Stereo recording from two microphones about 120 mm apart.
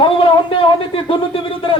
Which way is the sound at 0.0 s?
45° left (ahead or behind).